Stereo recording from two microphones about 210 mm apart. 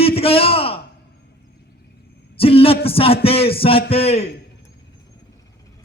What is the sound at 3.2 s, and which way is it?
A man's voice, 25° left (ahead or behind).